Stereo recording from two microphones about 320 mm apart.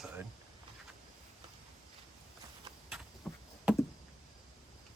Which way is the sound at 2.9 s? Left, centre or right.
Centre.